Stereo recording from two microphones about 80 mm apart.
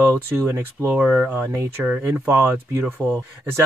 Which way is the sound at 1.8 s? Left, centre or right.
Centre.